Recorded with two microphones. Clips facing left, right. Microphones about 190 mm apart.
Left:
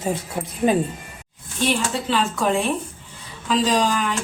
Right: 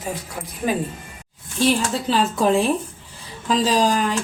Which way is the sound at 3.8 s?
40° right (ahead or behind).